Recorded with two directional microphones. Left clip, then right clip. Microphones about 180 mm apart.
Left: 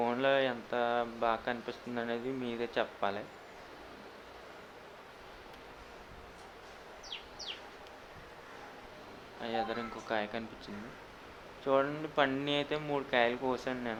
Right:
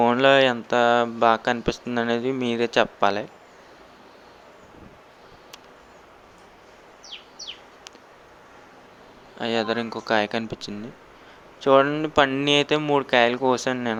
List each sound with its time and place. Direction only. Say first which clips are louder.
0.0 s speech: right 13 dB; 45° right (ahead or behind)
9.4 s speech: right 11 dB; 45° right (ahead or behind)